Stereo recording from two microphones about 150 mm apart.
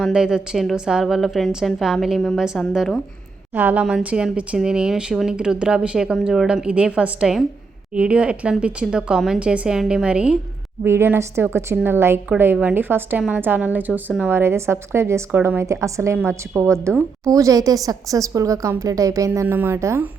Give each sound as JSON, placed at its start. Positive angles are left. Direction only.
{"t": 0.0, "sound": "speech", "side_deg": -5}
{"t": 3.5, "sound": "a woman's voice", "side_deg": -10}